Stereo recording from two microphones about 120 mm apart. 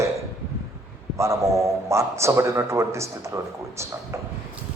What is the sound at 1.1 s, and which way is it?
Speech, 25° right (ahead or behind).